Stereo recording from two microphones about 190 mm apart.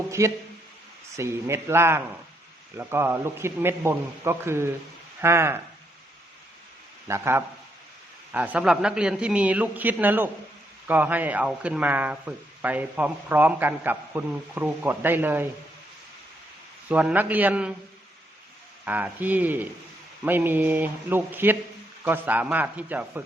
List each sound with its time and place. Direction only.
0.2 s speech: 15° right (ahead or behind)
7.1 s speech: 15° right (ahead or behind)
16.9 s speech: 10° right (ahead or behind)
18.9 s speech: 10° right (ahead or behind)